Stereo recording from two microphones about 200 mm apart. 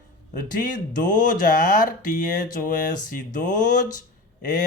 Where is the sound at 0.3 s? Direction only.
40° left (ahead or behind).